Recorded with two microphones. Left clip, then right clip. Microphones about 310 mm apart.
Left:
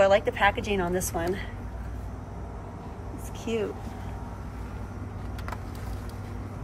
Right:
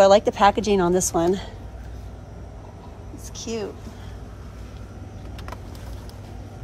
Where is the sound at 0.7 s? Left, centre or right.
Right.